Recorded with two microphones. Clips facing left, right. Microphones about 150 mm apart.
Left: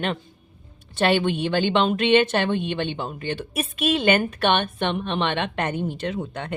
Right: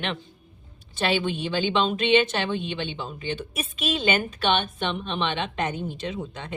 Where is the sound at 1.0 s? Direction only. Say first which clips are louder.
Left 5 dB; 55° left (ahead or behind).